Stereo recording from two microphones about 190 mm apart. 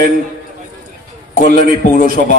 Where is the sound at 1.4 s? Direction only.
45° left (ahead or behind).